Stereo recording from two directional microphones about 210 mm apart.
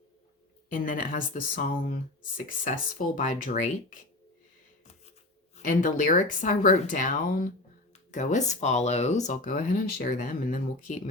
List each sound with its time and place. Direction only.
0.7 s speech: 40° left (ahead or behind)
5.5 s speech: 40° left (ahead or behind)